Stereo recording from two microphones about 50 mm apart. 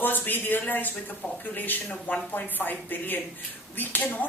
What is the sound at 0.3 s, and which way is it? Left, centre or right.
A woman's voice, left.